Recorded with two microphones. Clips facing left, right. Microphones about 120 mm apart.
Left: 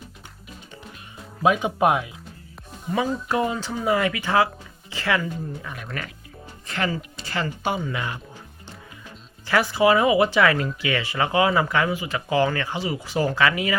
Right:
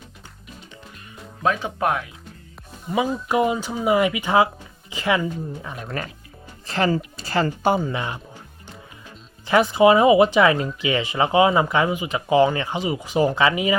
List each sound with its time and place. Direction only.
1.4 s speech: 15° left (ahead or behind)
2.9 s speech: 15° right (ahead or behind)
9.5 s speech: 20° right (ahead or behind)